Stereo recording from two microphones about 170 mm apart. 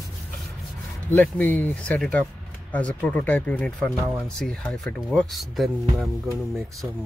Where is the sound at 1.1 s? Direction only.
10° left (ahead or behind).